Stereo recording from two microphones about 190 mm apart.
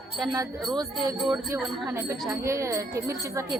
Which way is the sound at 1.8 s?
15° right (ahead or behind).